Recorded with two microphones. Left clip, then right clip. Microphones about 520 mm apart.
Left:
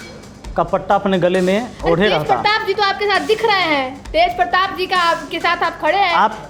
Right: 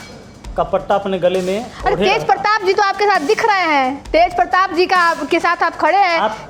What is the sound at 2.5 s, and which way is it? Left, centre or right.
A woman's voice, right.